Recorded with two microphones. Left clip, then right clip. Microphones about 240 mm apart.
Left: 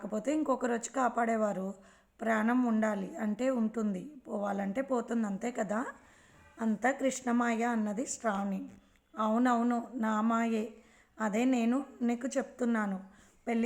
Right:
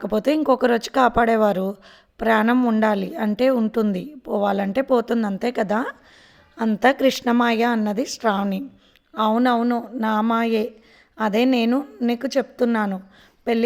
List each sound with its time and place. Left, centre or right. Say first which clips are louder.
0.0 s speech: right 13 dB; right
9.1 s speech: right 11 dB; right